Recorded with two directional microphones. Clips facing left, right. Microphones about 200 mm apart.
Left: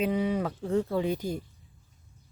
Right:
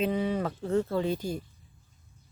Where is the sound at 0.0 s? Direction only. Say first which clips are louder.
Left 1 dB; 10° left (ahead or behind).